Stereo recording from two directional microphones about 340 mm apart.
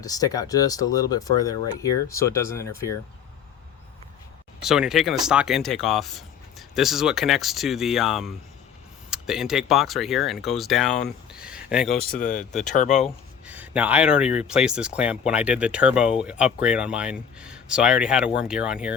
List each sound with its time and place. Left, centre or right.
0.0 s speech: centre
4.6 s speech: centre
12.7 s speech: left
13.5 s speech: centre